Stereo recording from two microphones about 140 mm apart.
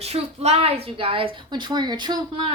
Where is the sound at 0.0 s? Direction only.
50° right (ahead or behind).